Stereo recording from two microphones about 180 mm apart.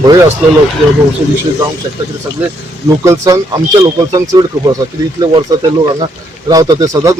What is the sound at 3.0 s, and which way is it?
Speech, 15° right (ahead or behind).